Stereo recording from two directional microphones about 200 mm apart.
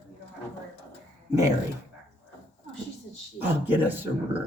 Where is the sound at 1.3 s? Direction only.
15° right (ahead or behind).